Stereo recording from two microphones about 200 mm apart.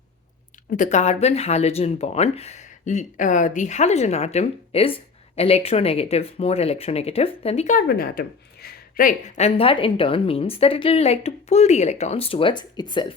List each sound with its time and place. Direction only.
0.8 s speech: 35° left (ahead or behind)
7.8 s speech: 50° left (ahead or behind); by 13.1 s 20° left (ahead or behind)